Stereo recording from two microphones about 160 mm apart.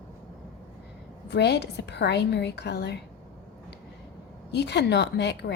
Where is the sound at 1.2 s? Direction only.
90° left.